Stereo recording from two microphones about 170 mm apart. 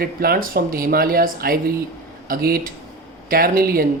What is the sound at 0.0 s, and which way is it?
Speech, 60° right (ahead or behind).